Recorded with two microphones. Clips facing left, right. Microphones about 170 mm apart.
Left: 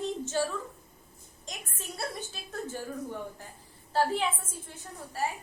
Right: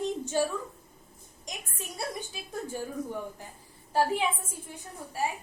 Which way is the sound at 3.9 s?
15° right (ahead or behind).